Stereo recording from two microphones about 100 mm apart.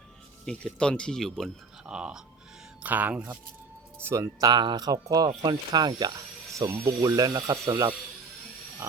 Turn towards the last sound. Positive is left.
turn(degrees=-35)  # may be behind; listen again after turning